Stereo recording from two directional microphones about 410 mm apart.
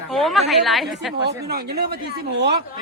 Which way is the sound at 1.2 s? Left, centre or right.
Right.